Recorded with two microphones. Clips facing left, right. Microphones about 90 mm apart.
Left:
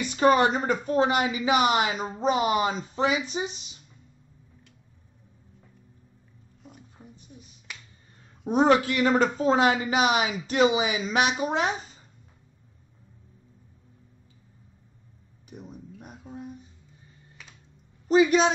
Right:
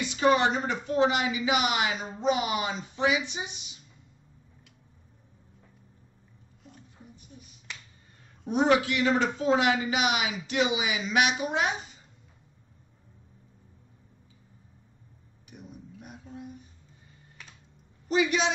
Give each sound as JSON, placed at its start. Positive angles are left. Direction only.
{"t": 0.0, "sound": "speech", "side_deg": 45}
{"t": 8.5, "sound": "speech", "side_deg": 40}
{"t": 15.5, "sound": "a sound", "side_deg": 40}
{"t": 18.0, "sound": "a woman's voice", "side_deg": 35}